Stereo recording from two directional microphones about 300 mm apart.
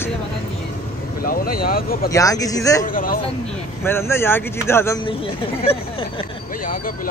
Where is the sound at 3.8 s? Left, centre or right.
Centre.